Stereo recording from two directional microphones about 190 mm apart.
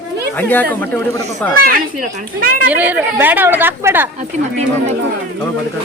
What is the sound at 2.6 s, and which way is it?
Speech, 10° right (ahead or behind).